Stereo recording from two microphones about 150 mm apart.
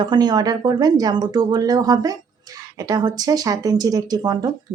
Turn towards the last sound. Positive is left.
turn(degrees=-25)  # may be behind; listen again after turning